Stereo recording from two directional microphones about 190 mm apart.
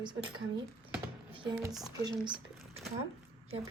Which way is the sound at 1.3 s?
25° right (ahead or behind).